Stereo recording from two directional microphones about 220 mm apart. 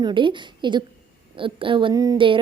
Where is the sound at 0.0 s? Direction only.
20° right (ahead or behind).